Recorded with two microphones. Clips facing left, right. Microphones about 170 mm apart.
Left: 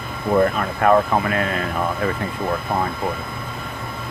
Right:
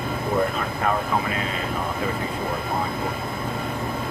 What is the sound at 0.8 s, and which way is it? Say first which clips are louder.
Speech: left 8 dB; 60° left (ahead or behind).